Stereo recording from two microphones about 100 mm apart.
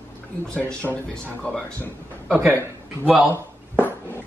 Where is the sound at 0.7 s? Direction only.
15° left (ahead or behind).